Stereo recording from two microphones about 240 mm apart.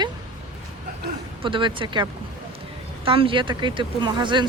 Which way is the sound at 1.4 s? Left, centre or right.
Right.